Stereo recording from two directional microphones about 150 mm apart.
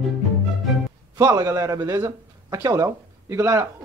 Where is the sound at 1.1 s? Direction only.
25° right (ahead or behind).